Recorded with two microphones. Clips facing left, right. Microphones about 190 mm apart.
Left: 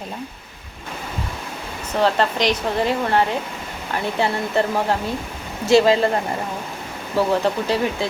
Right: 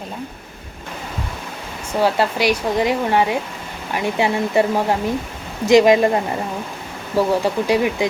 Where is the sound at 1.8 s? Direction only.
10° right (ahead or behind).